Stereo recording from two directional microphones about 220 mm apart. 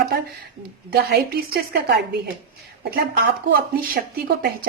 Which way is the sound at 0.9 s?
45° right (ahead or behind).